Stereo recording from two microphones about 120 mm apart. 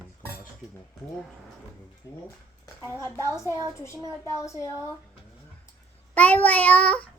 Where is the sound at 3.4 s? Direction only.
25° right (ahead or behind).